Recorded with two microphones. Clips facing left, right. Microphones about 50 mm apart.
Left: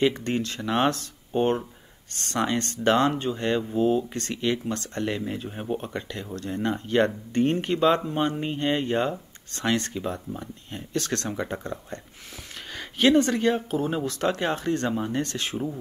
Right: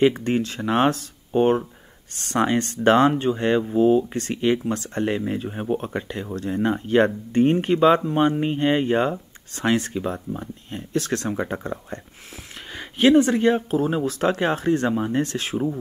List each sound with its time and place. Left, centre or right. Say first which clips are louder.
0.0 s speech: right 5 dB; centre
2.3 s speech: right 5 dB; centre
14.0 s speech: right 4 dB; centre